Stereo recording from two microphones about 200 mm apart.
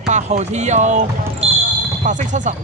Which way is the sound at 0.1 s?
35° right (ahead or behind).